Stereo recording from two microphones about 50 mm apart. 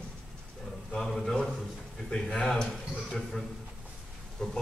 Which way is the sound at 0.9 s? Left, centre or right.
Centre.